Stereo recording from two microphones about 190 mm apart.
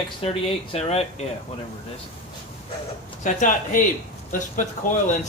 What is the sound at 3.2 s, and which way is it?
Speech, 40° left (ahead or behind).